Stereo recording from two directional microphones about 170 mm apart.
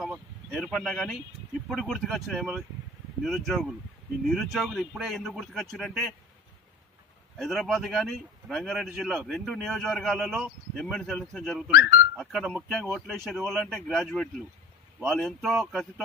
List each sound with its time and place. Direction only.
0.0 s speech: centre (ahead or behind)
7.3 s speech: centre (ahead or behind)
11.7 s speech: 65° left (ahead or behind)
12.2 s speech: centre (ahead or behind)